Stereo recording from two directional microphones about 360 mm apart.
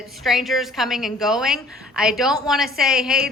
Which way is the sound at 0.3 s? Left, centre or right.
Centre.